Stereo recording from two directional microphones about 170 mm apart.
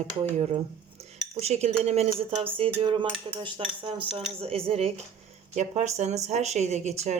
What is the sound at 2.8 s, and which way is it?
Speech, 30° right (ahead or behind).